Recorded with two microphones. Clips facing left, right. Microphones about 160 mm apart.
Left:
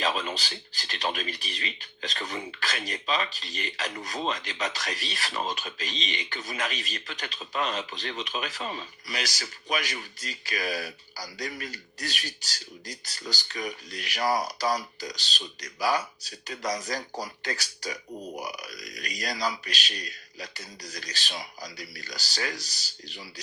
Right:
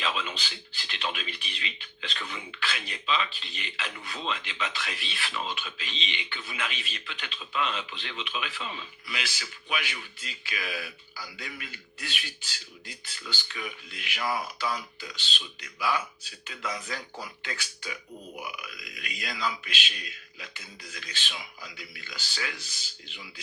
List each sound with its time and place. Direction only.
0.0 s speech: 40° left (ahead or behind)